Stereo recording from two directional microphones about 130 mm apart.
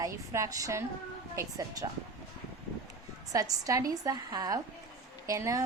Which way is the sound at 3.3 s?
25° right (ahead or behind).